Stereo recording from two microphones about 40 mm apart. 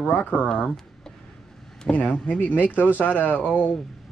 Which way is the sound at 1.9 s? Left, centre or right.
Left.